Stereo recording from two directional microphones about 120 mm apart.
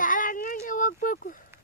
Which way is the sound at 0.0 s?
90° left.